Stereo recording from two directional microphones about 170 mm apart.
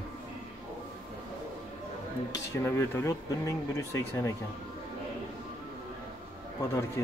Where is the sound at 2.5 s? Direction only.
15° left (ahead or behind).